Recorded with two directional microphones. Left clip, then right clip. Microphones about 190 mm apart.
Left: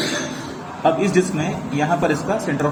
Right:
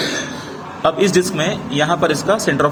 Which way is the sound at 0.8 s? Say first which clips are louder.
Right 3 dB; 35° right (ahead or behind).